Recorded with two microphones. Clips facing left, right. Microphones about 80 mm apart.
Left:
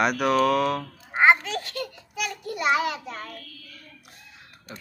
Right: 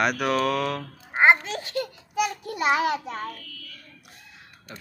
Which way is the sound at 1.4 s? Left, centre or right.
Right.